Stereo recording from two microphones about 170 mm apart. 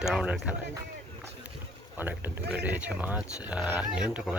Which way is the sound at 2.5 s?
10° right (ahead or behind).